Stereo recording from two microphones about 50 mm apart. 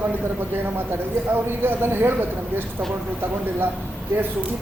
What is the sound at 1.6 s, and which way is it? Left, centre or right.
Speech, right.